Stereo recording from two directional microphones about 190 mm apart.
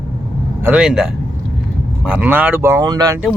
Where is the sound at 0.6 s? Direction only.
5° right (ahead or behind).